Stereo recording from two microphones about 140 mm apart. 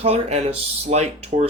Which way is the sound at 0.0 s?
45° right (ahead or behind).